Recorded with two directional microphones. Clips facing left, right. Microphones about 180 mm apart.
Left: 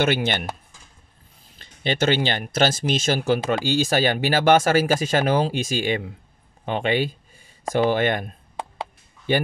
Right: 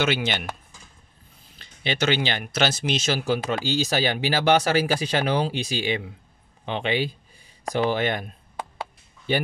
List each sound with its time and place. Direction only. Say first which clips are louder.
0.0 s speech: left 3 dB; 50° left (ahead or behind)
1.6 s speech: left 3 dB; 45° left (ahead or behind)